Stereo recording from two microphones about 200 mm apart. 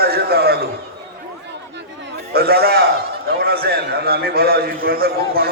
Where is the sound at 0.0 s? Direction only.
50° right (ahead or behind).